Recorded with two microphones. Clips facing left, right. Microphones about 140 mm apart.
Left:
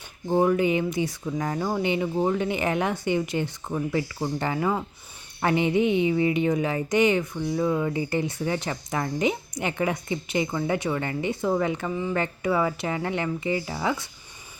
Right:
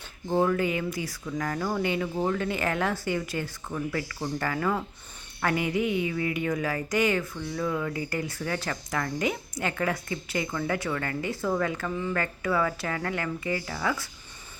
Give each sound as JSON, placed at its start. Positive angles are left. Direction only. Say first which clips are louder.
{"t": 0.3, "sound": "a woman's voice", "louder": "left 4 dB", "side_deg": 15}